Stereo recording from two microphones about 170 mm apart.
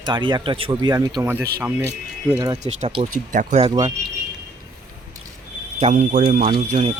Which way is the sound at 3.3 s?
50° right (ahead or behind).